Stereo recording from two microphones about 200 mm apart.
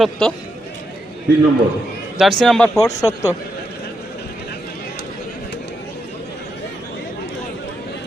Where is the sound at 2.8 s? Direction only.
15° left (ahead or behind).